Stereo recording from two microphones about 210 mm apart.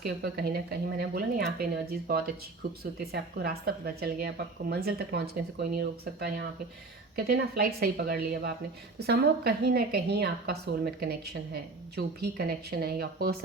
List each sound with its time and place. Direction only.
0.0 s a woman's voice: 50° right (ahead or behind)